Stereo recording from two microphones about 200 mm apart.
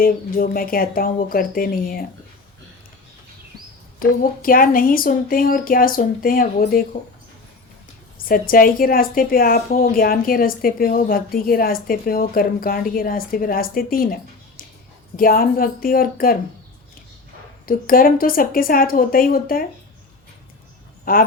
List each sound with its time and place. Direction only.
0.0 s a woman's voice: 45° left (ahead or behind)
4.0 s a woman's voice: 45° left (ahead or behind)
8.2 s a woman's voice: 45° left (ahead or behind)
17.7 s a woman's voice: 45° left (ahead or behind)
21.0 s speech: 45° left (ahead or behind)